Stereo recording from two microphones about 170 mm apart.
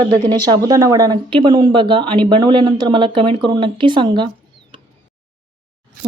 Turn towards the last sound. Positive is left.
turn(degrees=-30)  # may be behind; listen again after turning